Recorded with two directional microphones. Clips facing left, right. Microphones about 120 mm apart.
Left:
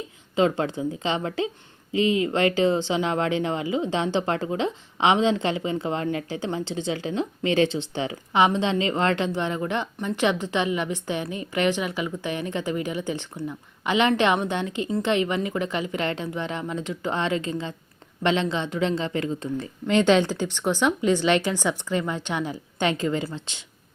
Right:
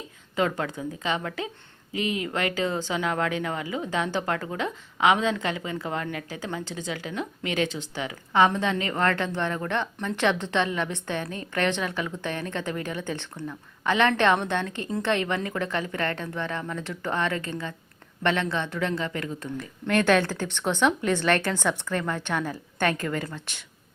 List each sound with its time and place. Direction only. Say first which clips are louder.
0.3 s speech: left 4 dB; 25° left (ahead or behind)
8.3 s a woman's voice: even; 15° left (ahead or behind)